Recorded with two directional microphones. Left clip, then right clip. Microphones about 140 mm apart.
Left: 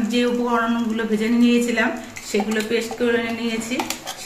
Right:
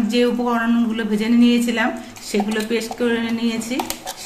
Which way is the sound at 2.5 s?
70° right (ahead or behind).